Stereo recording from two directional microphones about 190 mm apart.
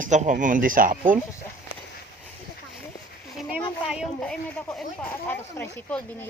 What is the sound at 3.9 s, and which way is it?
Speech, centre (ahead or behind).